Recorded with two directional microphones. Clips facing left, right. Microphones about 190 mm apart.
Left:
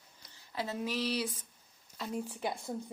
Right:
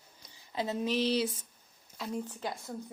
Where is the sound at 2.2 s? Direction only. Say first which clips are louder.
Left 1 dB; 15° left (ahead or behind).